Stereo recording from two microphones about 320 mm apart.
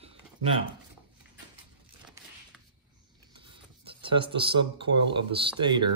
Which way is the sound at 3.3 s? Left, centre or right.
Centre.